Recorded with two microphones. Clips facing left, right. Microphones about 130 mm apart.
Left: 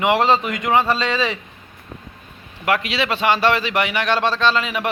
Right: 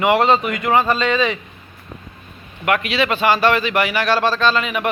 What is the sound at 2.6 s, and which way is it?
A man's voice, 25° left (ahead or behind).